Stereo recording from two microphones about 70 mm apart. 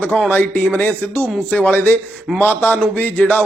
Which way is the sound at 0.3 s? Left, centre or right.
Left.